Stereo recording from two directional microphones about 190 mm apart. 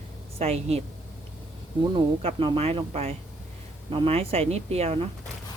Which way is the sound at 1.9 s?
30° right (ahead or behind).